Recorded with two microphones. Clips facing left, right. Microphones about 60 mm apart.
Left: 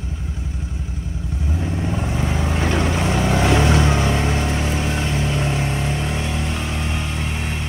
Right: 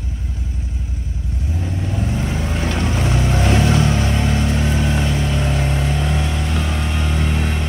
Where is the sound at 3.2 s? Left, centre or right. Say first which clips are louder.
Left 1 dB; left.